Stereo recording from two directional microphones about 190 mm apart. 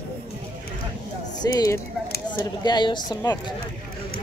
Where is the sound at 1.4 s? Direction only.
20° left (ahead or behind).